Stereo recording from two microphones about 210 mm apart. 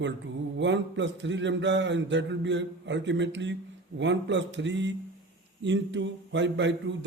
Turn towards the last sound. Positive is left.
turn(degrees=-60)  # may be behind; listen again after turning